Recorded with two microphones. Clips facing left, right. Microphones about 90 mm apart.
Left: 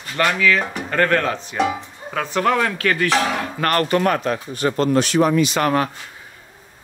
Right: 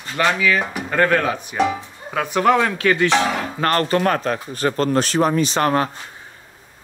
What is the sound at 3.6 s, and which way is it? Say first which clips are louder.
Speech: even; 30° right (ahead or behind).